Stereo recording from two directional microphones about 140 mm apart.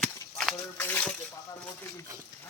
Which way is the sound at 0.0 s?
5° left (ahead or behind).